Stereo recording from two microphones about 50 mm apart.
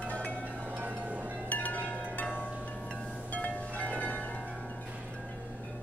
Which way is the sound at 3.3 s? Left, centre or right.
Left.